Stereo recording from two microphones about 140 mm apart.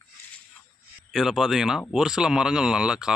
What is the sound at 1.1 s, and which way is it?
Speech, centre (ahead or behind).